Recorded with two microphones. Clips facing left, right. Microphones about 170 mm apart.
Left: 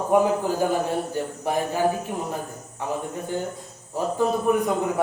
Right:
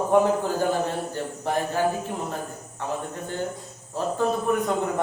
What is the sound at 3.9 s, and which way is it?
Speech, 10° left (ahead or behind).